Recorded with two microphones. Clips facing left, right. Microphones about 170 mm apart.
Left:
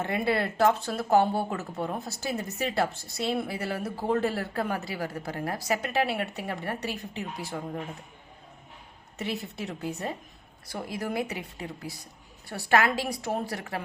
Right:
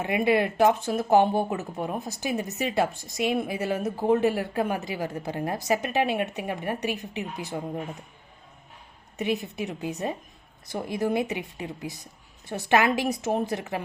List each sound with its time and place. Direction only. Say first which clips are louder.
0.0 s speech: right 4 dB; 15° right (ahead or behind)
9.1 s a woman's voice: right 5 dB; 15° right (ahead or behind)